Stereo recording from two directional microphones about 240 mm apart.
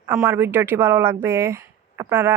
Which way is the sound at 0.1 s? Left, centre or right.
Centre.